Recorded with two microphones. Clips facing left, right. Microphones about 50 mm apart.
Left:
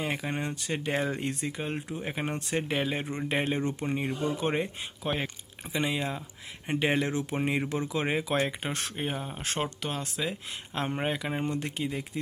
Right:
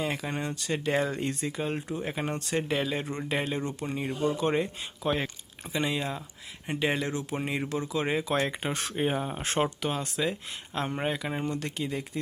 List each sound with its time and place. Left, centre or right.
0.0 s speech: centre
10.8 s speech: centre